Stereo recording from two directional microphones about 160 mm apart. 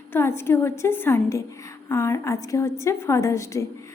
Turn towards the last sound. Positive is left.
turn(degrees=20)  # may be behind; listen again after turning